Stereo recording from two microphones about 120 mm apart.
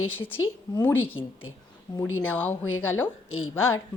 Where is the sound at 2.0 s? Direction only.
15° left (ahead or behind).